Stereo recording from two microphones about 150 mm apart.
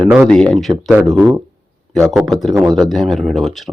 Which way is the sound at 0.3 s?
5° left (ahead or behind).